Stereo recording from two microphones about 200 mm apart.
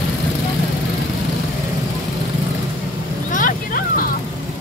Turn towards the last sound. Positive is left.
turn(degrees=45)  # may be behind; listen again after turning